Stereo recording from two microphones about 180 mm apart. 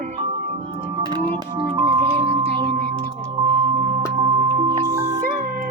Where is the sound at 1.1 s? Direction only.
25° right (ahead or behind).